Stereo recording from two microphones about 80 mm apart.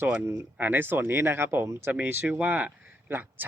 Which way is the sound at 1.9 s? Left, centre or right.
Right.